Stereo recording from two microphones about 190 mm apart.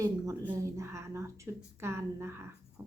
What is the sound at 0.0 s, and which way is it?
A woman's voice, 15° right (ahead or behind).